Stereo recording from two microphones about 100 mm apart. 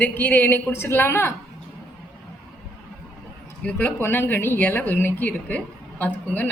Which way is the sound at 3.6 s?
20° left (ahead or behind).